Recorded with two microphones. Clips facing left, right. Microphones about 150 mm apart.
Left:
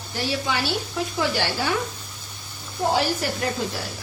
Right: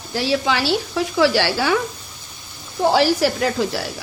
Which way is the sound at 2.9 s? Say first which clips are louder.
Right 7 dB; 90° right.